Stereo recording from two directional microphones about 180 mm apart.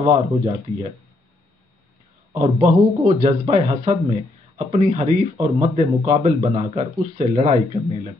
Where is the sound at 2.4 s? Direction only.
35° right (ahead or behind).